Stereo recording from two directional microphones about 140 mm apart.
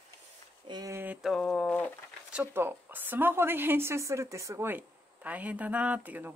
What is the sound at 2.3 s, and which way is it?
A woman's voice, 15° right (ahead or behind).